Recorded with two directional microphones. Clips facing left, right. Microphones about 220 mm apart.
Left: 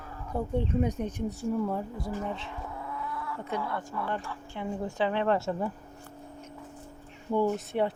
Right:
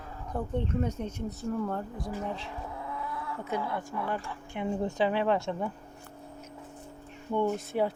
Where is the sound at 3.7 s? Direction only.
15° right (ahead or behind).